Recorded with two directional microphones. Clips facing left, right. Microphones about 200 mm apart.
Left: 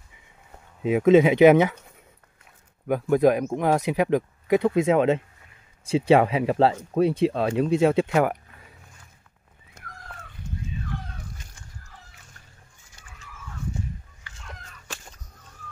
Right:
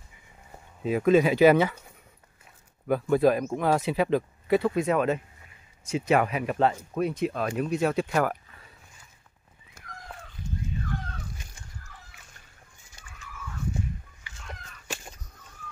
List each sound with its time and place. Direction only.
0.8 s speech: 20° left (ahead or behind)
2.9 s speech: 15° left (ahead or behind)